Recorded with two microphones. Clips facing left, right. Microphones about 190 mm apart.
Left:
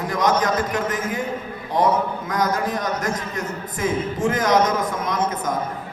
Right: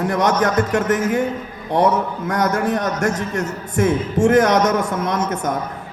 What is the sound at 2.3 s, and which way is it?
A man's voice, 65° right (ahead or behind).